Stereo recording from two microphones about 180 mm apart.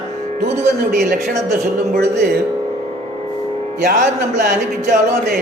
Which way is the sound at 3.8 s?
55° right (ahead or behind).